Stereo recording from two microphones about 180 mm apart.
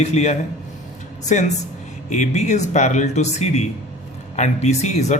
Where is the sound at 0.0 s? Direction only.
35° left (ahead or behind).